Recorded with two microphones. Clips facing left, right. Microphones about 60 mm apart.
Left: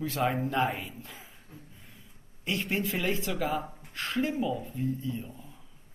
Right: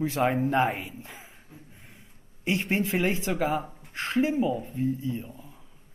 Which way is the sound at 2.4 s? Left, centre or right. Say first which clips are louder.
Right 4 dB; right.